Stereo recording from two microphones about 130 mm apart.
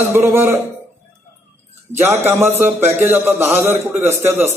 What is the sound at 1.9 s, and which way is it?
A man's voice, 15° right (ahead or behind).